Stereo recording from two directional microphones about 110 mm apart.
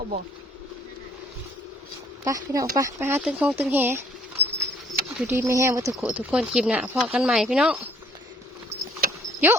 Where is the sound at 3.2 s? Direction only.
10° right (ahead or behind).